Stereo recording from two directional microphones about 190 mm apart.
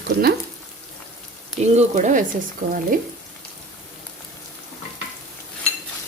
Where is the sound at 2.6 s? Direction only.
45° right (ahead or behind).